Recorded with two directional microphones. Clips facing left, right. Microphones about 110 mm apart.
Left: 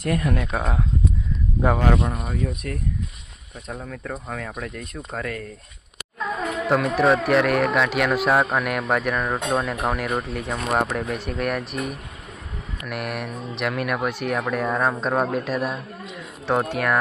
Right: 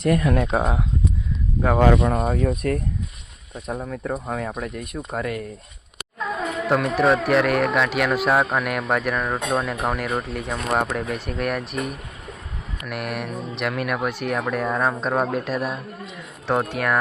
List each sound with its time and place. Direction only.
0.4 s speech: 20° right (ahead or behind)
2.1 s speech: 50° right (ahead or behind)
3.7 s speech: 15° right (ahead or behind)
6.1 s speech: centre (ahead or behind)